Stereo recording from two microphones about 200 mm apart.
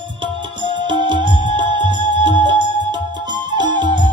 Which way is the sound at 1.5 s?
25° right (ahead or behind).